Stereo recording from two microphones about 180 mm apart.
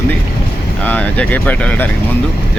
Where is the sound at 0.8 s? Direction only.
10° left (ahead or behind).